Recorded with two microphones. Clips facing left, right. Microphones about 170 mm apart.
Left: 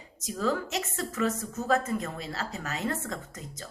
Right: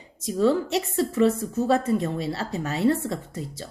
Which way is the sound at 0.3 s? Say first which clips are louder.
Right 8 dB; 30° right (ahead or behind).